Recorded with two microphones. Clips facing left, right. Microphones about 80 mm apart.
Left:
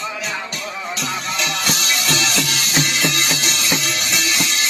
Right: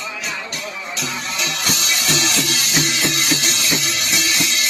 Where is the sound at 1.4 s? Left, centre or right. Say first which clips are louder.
Even; left.